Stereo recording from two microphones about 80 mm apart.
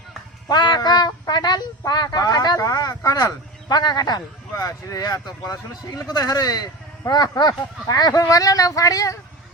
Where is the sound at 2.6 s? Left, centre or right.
Left.